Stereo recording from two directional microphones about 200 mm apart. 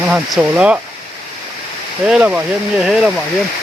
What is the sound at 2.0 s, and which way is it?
Speech, 5° right (ahead or behind).